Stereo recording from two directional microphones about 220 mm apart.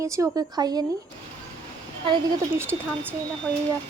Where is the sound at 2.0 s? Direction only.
20° right (ahead or behind).